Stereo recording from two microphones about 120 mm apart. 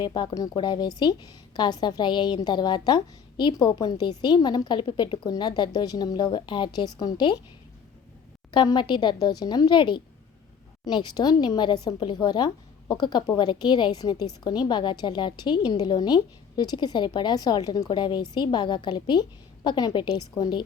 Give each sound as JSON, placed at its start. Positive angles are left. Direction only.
{"t": 0.0, "sound": "a woman's voice", "side_deg": 35}
{"t": 8.5, "sound": "a woman's voice", "side_deg": 40}